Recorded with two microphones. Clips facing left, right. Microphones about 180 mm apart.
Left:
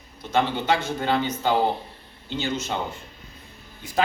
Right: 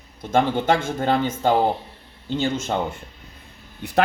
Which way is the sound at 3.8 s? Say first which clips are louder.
Right 8 dB; 60° right (ahead or behind).